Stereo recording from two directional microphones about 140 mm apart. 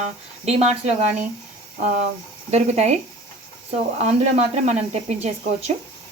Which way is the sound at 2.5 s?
55° right (ahead or behind).